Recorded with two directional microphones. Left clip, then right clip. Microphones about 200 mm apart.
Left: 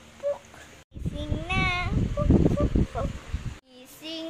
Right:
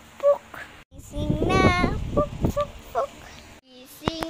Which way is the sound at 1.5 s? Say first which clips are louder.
Right 6 dB; 20° right (ahead or behind).